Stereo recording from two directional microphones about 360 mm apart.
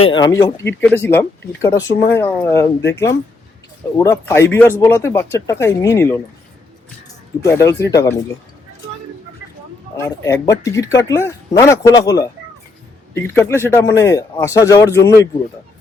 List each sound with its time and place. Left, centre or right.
0.1 s speech: centre
7.4 s speech: centre
10.0 s speech: centre